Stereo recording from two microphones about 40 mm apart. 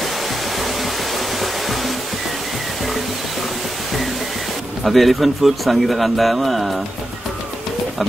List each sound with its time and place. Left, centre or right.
4.8 s speech: centre